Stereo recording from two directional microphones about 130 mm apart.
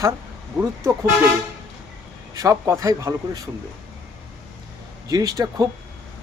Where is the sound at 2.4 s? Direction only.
25° right (ahead or behind).